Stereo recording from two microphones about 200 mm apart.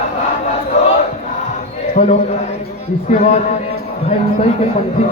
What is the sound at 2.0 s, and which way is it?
Speech, 40° left (ahead or behind).